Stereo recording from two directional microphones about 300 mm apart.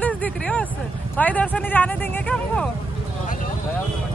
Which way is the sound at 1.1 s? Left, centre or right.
Centre.